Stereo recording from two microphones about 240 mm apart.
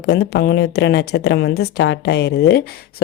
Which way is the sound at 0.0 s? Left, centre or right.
Left.